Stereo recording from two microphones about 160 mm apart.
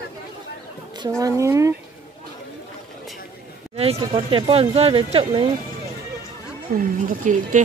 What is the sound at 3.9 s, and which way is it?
A woman's voice, 30° right (ahead or behind).